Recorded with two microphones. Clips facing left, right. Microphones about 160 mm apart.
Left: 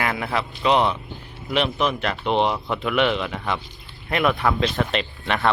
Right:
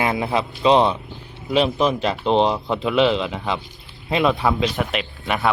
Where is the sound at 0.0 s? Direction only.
20° right (ahead or behind).